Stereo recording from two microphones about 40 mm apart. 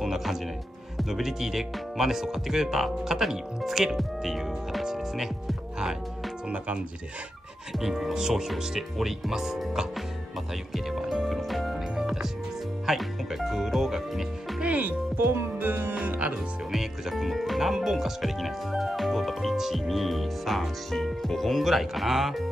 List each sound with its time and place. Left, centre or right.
0.0 s music: centre
0.9 s speech: centre
7.7 s speech: centre
10.7 s speech: centre
11.9 s music: centre
12.8 s speech: centre
14.6 s music: right
15.1 s music: right
16.1 s music: right
16.7 s speech: centre